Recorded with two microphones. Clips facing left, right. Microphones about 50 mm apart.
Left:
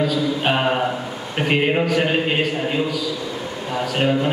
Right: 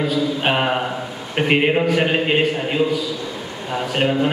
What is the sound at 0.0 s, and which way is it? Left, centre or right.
A man's voice, centre.